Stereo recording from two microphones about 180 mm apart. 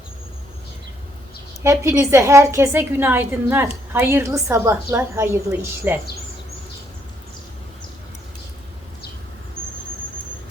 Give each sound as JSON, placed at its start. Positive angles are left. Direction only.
{"t": 1.6, "sound": "a woman's voice", "side_deg": -15}